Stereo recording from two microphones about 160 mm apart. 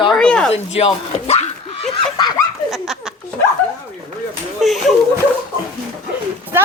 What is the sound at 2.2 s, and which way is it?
Speech, 25° left (ahead or behind).